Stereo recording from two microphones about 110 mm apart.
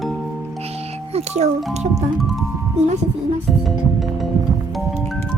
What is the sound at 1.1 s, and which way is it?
Music, 80° right.